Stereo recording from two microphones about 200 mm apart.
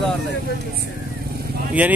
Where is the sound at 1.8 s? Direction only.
5° right (ahead or behind).